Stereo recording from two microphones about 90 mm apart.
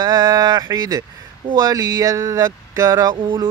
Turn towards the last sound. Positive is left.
turn(degrees=-35)  # may be behind; listen again after turning